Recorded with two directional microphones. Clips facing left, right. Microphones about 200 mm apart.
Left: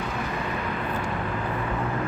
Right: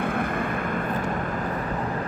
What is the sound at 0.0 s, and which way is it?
Vehicle, 55° right (ahead or behind).